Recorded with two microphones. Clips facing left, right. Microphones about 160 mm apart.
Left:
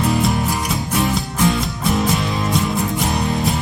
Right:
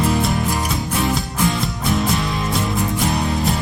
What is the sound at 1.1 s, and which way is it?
Music, centre (ahead or behind).